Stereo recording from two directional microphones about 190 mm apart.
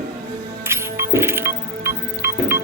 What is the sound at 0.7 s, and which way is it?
Music, 15° right (ahead or behind).